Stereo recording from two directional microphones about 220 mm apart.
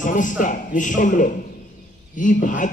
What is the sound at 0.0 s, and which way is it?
Speech, 35° left (ahead or behind).